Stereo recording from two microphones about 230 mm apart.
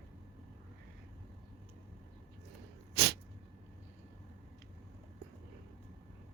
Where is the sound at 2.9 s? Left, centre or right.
Right.